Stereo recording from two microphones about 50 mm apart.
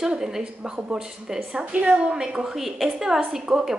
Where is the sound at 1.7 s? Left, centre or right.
Right.